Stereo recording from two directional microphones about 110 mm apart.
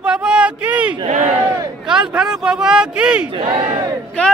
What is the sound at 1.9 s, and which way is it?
Speech, 5° right (ahead or behind).